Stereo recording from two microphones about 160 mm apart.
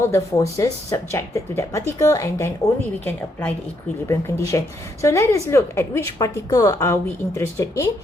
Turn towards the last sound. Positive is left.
turn(degrees=15)  # may be behind; listen again after turning